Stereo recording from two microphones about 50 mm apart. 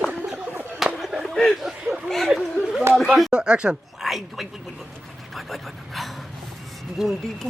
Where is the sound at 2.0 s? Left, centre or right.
Centre.